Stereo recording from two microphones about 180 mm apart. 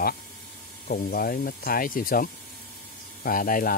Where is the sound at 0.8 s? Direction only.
55° left (ahead or behind).